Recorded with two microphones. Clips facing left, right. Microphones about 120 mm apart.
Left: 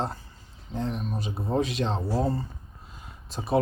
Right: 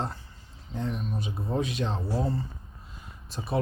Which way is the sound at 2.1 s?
40° left (ahead or behind).